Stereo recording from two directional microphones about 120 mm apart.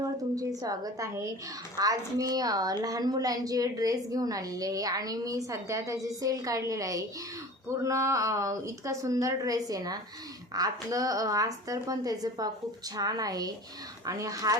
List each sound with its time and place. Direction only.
0.3 s a woman's voice: 30° right (ahead or behind)